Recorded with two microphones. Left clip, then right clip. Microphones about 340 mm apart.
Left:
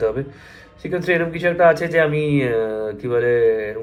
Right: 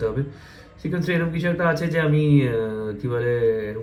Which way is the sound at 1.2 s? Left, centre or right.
Centre.